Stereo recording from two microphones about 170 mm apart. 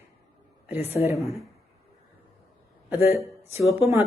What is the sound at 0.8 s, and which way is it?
Speech, 35° left (ahead or behind).